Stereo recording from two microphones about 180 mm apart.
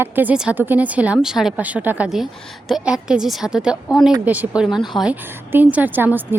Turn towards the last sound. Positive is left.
turn(degrees=-10)  # may be behind; listen again after turning